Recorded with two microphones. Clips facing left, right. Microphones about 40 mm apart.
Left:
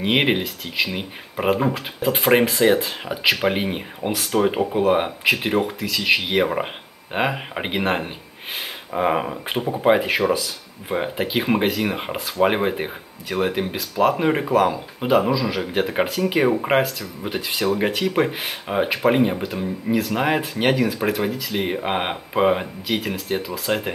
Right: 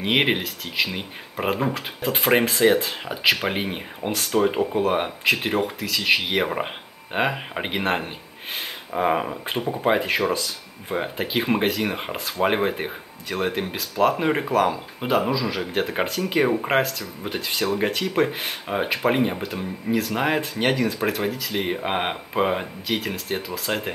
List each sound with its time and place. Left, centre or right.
0.0 s speech: centre